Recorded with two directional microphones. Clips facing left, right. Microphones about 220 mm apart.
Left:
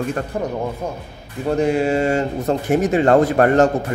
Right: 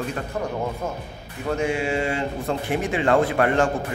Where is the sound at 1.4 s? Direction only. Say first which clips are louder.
Left 6 dB; 35° left (ahead or behind).